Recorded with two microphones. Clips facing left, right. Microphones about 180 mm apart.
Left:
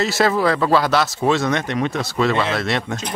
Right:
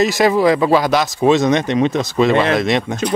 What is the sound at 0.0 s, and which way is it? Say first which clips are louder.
Speech: right 4 dB; 15° right (ahead or behind).